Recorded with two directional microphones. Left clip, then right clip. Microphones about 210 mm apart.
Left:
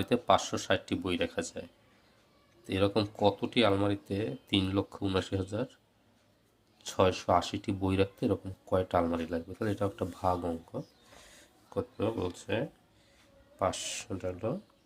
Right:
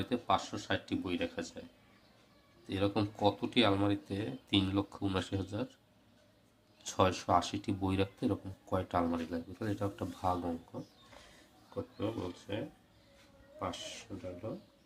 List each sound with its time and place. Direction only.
0.0 s speech: 25° left (ahead or behind)
2.6 s speech: 20° left (ahead or behind)
6.8 s speech: 15° left (ahead or behind)
11.7 s speech: 35° left (ahead or behind)